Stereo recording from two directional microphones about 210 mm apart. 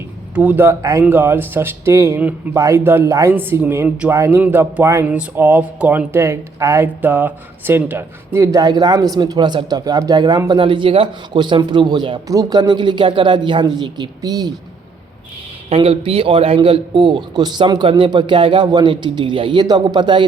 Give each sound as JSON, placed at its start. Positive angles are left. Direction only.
{"t": 0.3, "sound": "speech", "side_deg": -10}
{"t": 15.7, "sound": "a man's voice", "side_deg": -25}